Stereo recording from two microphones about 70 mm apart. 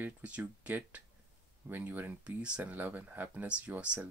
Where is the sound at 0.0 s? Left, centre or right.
Right.